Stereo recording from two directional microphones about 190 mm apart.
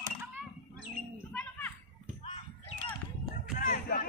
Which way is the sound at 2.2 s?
30° left (ahead or behind).